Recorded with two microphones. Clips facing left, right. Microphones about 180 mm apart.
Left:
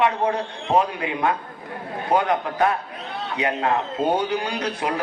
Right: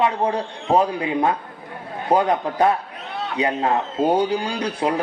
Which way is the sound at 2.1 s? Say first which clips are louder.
Right 3 dB; 35° right (ahead or behind).